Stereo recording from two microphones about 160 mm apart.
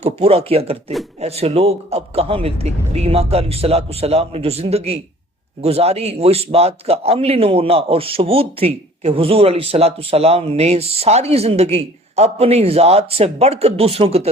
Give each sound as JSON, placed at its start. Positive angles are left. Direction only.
{"t": 0.0, "sound": "a man's voice", "side_deg": -40}